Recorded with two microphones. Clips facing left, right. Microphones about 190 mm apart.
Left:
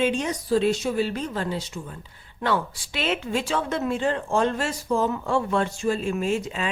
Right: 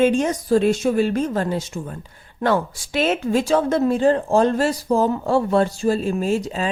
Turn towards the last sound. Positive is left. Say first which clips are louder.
# right 4 dB
turn(degrees=-35)  # may be behind; listen again after turning